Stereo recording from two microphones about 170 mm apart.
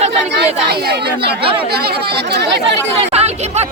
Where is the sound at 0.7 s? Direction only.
70° right (ahead or behind).